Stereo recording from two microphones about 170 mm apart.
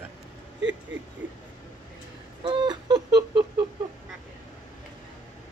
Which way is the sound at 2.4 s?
25° right (ahead or behind).